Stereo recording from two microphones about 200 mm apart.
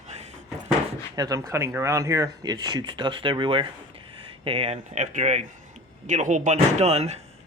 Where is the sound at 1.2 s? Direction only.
15° right (ahead or behind).